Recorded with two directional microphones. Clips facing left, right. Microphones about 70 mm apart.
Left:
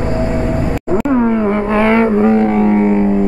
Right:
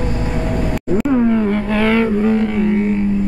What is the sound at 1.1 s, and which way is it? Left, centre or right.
Vehicle, left.